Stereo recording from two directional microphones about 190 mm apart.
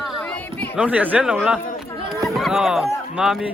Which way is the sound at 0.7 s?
5° right (ahead or behind).